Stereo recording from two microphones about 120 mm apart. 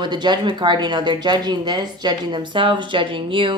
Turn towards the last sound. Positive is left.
turn(degrees=-45)  # may be behind; listen again after turning